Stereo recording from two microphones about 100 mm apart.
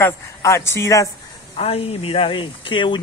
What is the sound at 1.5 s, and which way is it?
Speech, 85° left.